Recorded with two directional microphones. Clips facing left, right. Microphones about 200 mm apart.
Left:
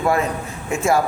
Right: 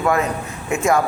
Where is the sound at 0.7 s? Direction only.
25° left (ahead or behind).